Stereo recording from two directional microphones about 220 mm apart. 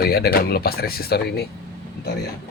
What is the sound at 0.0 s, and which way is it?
Speech, 45° left (ahead or behind).